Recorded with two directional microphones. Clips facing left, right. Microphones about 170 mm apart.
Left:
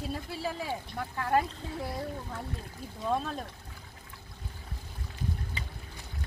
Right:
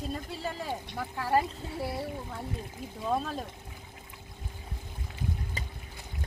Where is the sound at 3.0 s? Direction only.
Centre (ahead or behind).